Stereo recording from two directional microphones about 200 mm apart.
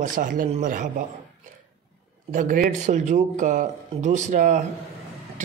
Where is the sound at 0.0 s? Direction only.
40° right (ahead or behind).